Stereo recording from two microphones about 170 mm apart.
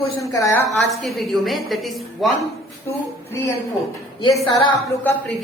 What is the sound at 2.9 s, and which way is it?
Speech, 15° left (ahead or behind).